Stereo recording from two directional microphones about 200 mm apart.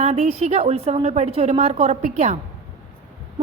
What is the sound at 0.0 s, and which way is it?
A woman's voice, 35° right (ahead or behind).